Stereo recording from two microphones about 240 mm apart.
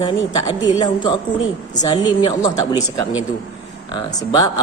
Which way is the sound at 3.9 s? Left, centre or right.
Centre.